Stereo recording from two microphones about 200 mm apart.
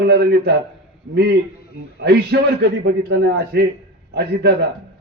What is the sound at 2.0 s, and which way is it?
A man's voice, 55° right (ahead or behind).